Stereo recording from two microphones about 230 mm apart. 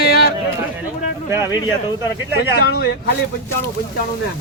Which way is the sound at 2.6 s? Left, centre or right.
Left.